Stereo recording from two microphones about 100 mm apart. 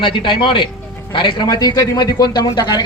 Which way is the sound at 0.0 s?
55° left (ahead or behind).